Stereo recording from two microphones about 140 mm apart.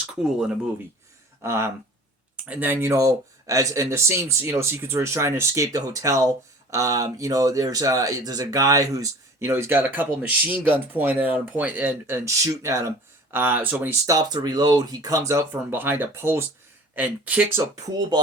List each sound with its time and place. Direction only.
0.3 s speech: 5° right (ahead or behind)
1.4 s speech: 20° right (ahead or behind)
13.3 s speech: 15° right (ahead or behind)
14.2 s speech: 30° right (ahead or behind); by 17.6 s 10° right (ahead or behind)